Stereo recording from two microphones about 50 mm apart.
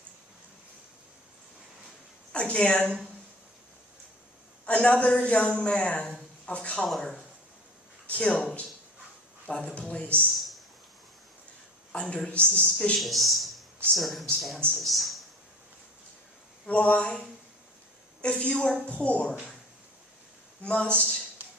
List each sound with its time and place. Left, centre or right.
2.3 s a woman's voice: left
4.6 s a man's voice: left
7.0 s speech: centre
8.0 s speech: left
9.5 s a man's voice: left
10.3 s a sound: centre
12.1 s a man's voice: left
13.0 s speech: centre
16.6 s a man's voice: left
18.2 s a man's voice: left
20.6 s a man's voice: left